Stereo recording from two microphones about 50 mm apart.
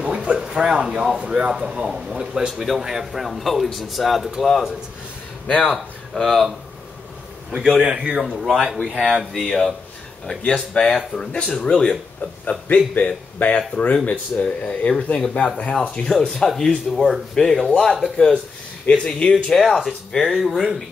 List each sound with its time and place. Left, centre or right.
0.0 s speech: right; by 6.5 s centre
7.5 s speech: centre
9.3 s speech: centre
10.4 s speech: left
12.4 s speech: left
19.4 s speech: centre